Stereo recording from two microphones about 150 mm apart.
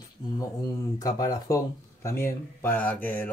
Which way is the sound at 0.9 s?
25° left (ahead or behind).